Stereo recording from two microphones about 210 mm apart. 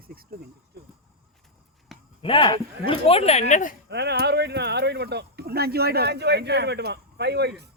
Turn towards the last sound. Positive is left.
turn(degrees=-50)  # may be behind; listen again after turning